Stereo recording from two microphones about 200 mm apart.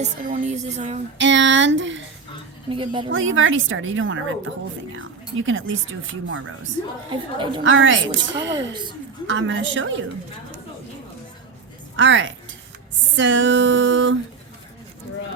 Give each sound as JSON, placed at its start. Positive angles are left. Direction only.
{"t": 0.0, "sound": "music", "side_deg": -35}
{"t": 1.2, "sound": "speech", "side_deg": -65}
{"t": 2.6, "sound": "a woman's voice", "side_deg": -25}
{"t": 3.1, "sound": "speech", "side_deg": -75}
{"t": 7.1, "sound": "a woman's voice", "side_deg": -25}
{"t": 7.6, "sound": "speech", "side_deg": -75}
{"t": 9.2, "sound": "speech", "side_deg": -70}
{"t": 11.9, "sound": "speech", "side_deg": -70}